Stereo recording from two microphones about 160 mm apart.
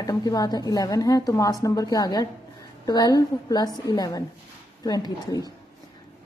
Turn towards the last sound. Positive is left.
turn(degrees=25)  # may be behind; listen again after turning